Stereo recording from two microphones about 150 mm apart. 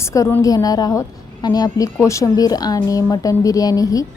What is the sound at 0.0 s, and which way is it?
A woman's voice, 20° left (ahead or behind).